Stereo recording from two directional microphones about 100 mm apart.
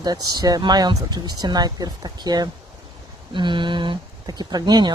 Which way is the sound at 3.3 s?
55° right (ahead or behind).